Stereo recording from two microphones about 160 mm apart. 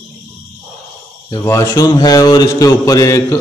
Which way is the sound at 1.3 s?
20° left (ahead or behind).